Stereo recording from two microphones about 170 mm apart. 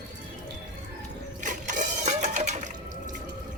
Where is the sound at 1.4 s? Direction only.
45° right (ahead or behind).